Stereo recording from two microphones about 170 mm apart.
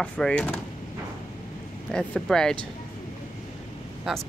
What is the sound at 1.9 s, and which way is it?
Speech, 5° left (ahead or behind).